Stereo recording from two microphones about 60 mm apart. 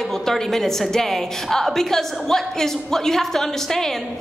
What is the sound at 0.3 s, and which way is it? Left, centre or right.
A woman's voice, centre.